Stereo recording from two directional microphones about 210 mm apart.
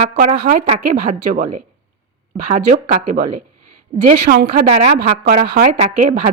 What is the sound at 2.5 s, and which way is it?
Speech, 40° right (ahead or behind).